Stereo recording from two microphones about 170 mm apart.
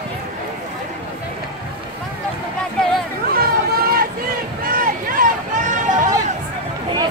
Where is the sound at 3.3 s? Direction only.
60° right (ahead or behind).